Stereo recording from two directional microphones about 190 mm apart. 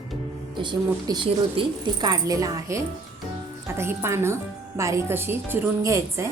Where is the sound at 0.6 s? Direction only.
25° right (ahead or behind).